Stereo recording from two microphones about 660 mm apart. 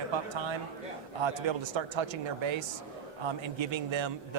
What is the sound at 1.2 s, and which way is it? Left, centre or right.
Speech, right.